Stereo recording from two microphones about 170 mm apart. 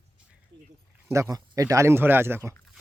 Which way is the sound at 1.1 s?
20° right (ahead or behind).